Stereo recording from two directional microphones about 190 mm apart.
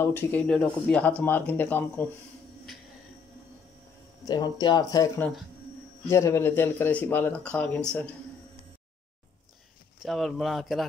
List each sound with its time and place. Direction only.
0.0 s speech: 10° left (ahead or behind)
4.3 s speech: 20° left (ahead or behind)
10.0 s speech: centre (ahead or behind)